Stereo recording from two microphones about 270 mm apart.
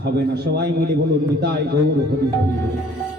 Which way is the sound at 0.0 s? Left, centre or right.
Right.